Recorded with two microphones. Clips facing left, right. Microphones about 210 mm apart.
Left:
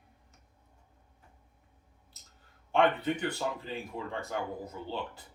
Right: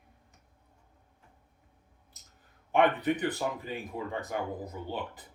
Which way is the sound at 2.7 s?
15° right (ahead or behind).